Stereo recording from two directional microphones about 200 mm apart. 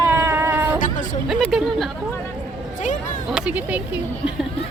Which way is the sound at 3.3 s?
5° right (ahead or behind).